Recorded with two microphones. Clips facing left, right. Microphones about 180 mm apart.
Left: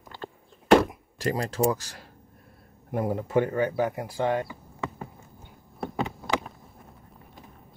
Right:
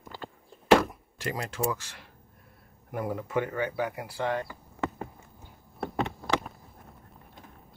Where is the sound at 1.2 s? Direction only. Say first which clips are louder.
Left 6 dB; 35° left (ahead or behind).